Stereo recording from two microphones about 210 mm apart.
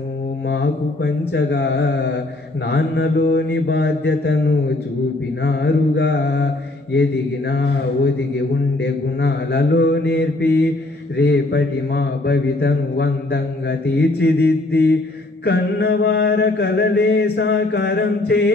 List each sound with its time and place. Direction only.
1.3 s a man's voice: 55° left (ahead or behind)
5.4 s mantra: 55° left (ahead or behind)
7.0 s a man's voice: 50° left (ahead or behind)